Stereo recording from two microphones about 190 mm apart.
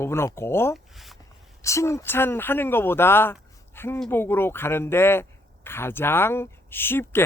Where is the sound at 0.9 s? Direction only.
Centre (ahead or behind).